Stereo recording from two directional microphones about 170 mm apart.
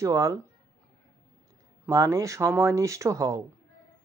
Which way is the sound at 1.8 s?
15° right (ahead or behind).